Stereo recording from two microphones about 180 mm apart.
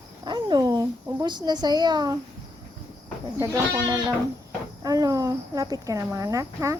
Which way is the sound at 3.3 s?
20° right (ahead or behind).